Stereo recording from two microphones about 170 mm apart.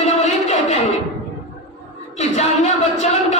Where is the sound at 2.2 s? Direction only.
40° left (ahead or behind).